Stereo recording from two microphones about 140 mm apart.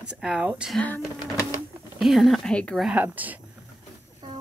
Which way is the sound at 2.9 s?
10° right (ahead or behind).